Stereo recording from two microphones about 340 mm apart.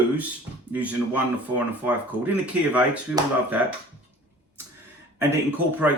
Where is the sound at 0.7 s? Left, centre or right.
Centre.